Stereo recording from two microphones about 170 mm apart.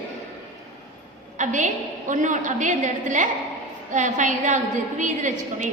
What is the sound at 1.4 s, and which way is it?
A woman's voice, 45° right (ahead or behind).